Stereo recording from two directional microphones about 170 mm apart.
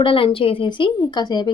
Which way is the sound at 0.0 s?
30° left (ahead or behind).